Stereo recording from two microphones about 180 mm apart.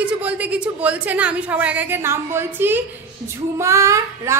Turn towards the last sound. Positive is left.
turn(degrees=-15)  # may be behind; listen again after turning